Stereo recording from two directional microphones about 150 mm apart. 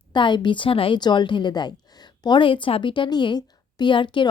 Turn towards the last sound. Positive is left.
turn(degrees=35)  # may be behind; listen again after turning